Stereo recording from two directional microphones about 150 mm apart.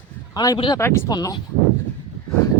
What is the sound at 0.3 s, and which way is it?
Speech, 30° left (ahead or behind).